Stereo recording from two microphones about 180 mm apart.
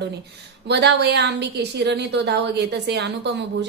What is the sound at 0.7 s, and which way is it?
A woman's voice, 70° right (ahead or behind).